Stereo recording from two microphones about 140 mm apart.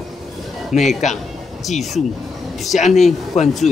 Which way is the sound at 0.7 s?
60° left (ahead or behind).